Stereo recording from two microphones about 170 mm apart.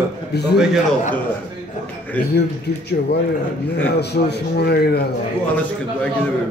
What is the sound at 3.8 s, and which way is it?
Speech, 75° left (ahead or behind).